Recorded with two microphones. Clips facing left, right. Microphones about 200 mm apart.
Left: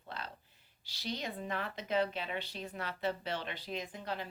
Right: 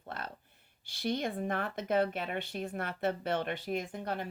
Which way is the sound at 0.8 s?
55° right (ahead or behind).